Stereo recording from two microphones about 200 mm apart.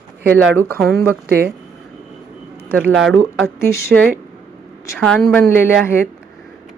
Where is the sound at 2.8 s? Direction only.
Centre (ahead or behind).